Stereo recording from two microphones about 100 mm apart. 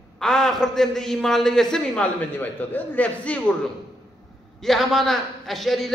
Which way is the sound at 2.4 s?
15° left (ahead or behind).